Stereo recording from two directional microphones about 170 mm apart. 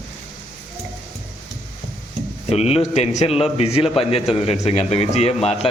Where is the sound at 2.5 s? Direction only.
40° left (ahead or behind).